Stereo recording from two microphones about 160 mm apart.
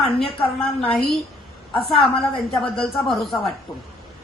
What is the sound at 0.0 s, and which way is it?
Speech, 35° left (ahead or behind).